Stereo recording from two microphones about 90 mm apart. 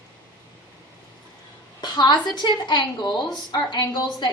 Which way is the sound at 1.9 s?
55° left (ahead or behind).